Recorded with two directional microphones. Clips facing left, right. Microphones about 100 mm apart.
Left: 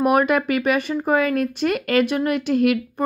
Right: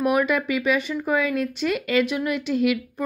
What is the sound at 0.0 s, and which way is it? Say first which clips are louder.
Speech: left 4 dB; 50° left (ahead or behind).